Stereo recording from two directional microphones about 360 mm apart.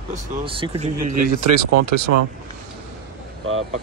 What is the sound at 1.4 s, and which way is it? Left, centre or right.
Speech, right.